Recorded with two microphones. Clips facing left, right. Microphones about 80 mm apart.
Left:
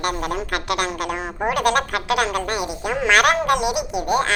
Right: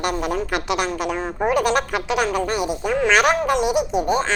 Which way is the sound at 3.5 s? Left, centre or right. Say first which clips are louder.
Right 3 dB; left.